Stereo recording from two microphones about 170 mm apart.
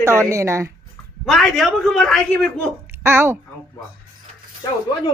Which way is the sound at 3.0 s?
15° right (ahead or behind).